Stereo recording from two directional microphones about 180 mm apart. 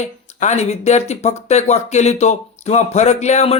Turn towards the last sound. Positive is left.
turn(degrees=35)  # may be behind; listen again after turning